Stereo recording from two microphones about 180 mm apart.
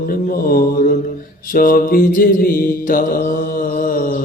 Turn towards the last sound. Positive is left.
turn(degrees=50)  # may be behind; listen again after turning